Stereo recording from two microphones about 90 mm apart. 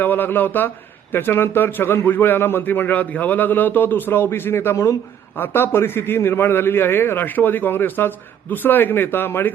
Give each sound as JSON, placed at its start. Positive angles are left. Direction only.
{"t": 0.0, "sound": "a man's voice", "side_deg": 20}